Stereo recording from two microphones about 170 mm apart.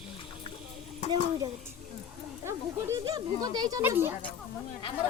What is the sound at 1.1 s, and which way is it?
Speech, 25° right (ahead or behind).